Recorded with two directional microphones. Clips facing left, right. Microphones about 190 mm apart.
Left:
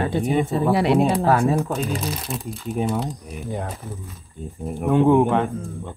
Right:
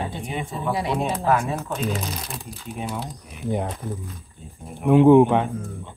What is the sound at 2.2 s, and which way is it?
Speech, centre (ahead or behind).